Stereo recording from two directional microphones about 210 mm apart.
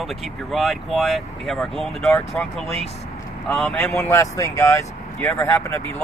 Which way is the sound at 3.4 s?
5° left (ahead or behind).